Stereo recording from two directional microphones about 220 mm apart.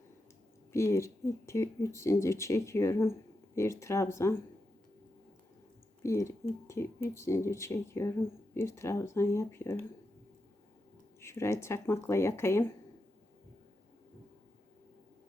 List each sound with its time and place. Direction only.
0.7 s speech: 15° left (ahead or behind)
6.0 s speech: 15° left (ahead or behind)
11.2 s speech: 10° left (ahead or behind)